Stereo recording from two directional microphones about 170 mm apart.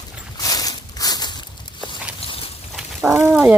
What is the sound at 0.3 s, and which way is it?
Walk, 20° left (ahead or behind).